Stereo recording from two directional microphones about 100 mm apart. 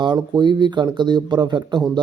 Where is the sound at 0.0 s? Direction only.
50° right (ahead or behind).